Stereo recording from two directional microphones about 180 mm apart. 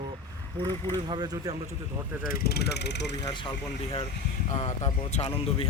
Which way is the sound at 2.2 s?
60° left (ahead or behind).